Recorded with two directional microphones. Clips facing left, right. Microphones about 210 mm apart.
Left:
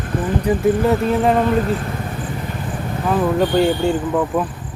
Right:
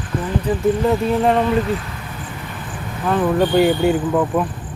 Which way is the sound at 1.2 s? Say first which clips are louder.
Even; centre (ahead or behind).